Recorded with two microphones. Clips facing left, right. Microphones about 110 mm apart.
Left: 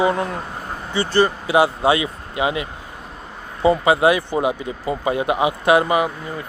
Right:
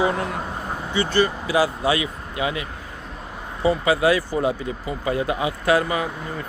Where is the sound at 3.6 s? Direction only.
25° left (ahead or behind).